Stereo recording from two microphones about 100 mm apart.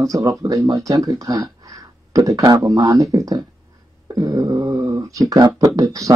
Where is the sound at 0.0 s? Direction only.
35° right (ahead or behind).